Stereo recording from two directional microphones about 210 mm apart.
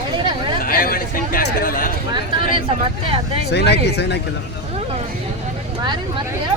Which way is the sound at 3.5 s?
55° left (ahead or behind).